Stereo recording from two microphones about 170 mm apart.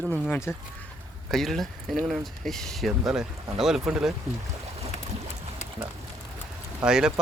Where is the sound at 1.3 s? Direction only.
Centre (ahead or behind).